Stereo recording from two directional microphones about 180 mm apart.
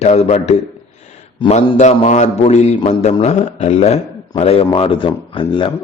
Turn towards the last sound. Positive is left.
turn(degrees=30)  # may be behind; listen again after turning